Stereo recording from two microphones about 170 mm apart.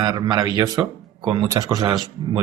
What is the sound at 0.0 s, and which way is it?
Speech, 25° right (ahead or behind).